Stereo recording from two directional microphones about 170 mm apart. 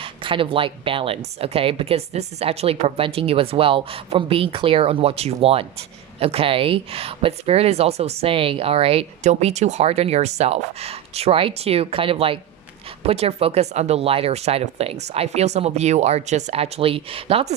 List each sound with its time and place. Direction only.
0.0 s speech: 30° right (ahead or behind)